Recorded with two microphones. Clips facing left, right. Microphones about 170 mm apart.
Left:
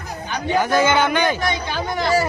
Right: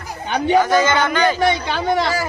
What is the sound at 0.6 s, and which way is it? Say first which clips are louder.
Speech: right 1 dB; 10° left (ahead or behind).